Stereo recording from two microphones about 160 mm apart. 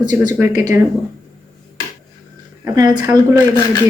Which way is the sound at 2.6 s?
25° right (ahead or behind).